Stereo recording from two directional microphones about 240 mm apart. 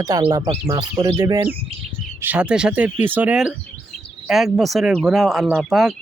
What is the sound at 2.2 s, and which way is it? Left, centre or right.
Speech, centre.